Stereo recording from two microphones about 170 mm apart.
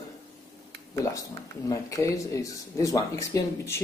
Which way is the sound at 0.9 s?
20° left (ahead or behind).